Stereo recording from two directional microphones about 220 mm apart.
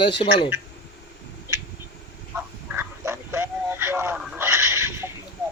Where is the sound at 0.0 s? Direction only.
25° left (ahead or behind).